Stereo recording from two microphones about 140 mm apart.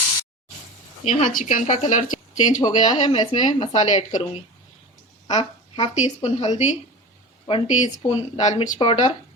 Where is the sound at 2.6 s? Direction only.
30° left (ahead or behind).